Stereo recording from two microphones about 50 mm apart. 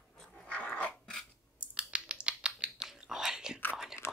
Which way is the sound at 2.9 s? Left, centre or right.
Centre.